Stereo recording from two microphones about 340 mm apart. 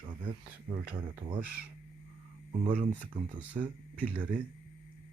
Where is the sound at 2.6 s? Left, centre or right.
Centre.